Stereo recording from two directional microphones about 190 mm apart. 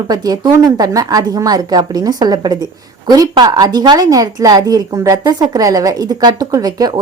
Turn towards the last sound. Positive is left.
turn(degrees=-20)  # may be behind; listen again after turning